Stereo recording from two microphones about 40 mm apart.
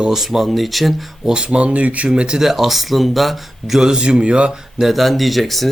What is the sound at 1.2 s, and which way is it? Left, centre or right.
Speech, right.